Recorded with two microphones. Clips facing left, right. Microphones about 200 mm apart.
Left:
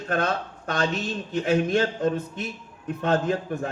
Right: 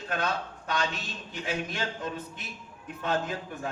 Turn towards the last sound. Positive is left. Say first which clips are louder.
# left 8 dB
turn(degrees=50)  # may be behind; listen again after turning